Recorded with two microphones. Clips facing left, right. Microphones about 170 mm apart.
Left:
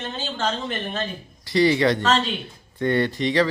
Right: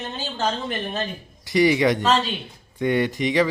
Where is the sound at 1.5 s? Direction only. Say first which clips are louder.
Even; 15° right (ahead or behind).